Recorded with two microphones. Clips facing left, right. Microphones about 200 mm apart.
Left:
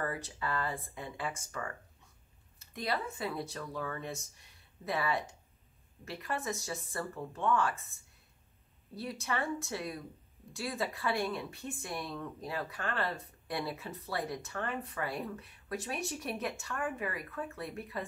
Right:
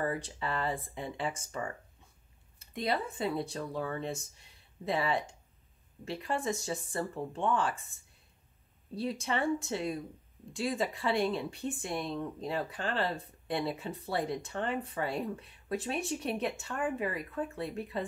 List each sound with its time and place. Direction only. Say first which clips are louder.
0.0 s speech: right 3 dB; 20° right (ahead or behind)
2.7 s speech: right 3 dB; 25° right (ahead or behind)
9.0 s speech: right 4 dB; 25° right (ahead or behind)